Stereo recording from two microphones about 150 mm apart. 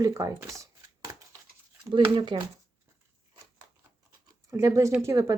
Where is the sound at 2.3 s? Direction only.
30° right (ahead or behind).